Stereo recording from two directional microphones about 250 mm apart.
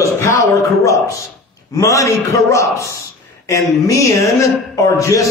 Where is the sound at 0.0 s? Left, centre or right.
Centre.